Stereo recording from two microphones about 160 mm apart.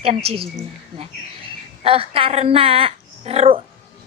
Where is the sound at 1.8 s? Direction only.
35° right (ahead or behind).